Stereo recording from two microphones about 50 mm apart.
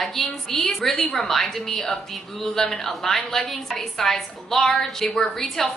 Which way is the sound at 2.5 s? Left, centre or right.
Centre.